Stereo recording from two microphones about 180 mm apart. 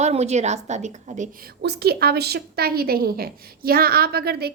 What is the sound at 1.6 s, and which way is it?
A woman's voice, 60° right (ahead or behind).